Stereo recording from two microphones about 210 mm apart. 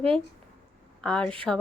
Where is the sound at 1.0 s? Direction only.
5° left (ahead or behind).